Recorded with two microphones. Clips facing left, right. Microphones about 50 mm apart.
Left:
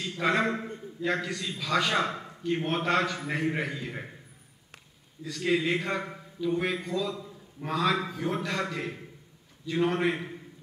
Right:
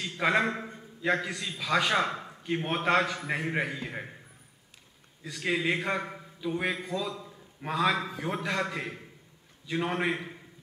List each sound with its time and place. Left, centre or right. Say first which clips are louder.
0.0 s a man's voice: even; centre
5.2 s a man's voice: left 2 dB; centre